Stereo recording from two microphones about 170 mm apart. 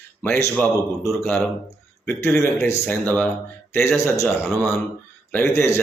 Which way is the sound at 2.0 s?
15° left (ahead or behind).